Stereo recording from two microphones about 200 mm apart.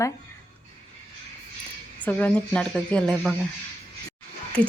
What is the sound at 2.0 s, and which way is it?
A woman's voice, 10° left (ahead or behind).